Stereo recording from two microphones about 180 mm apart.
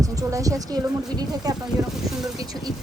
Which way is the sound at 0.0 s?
20° right (ahead or behind).